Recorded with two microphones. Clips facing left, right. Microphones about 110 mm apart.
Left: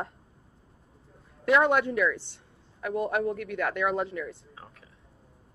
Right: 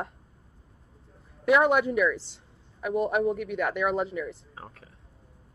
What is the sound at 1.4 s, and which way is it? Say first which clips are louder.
A man's voice: right 1 dB; 5° right (ahead or behind).